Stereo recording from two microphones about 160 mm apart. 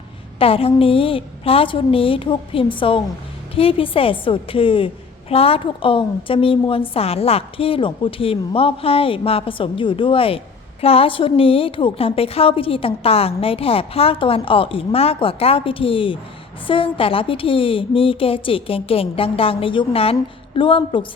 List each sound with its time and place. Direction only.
0.3 s a woman's voice: 35° left (ahead or behind)